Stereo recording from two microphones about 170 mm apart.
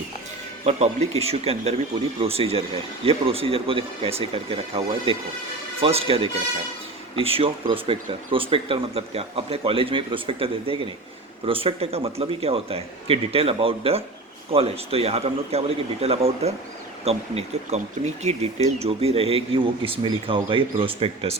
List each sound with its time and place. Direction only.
0.6 s speech: 40° right (ahead or behind)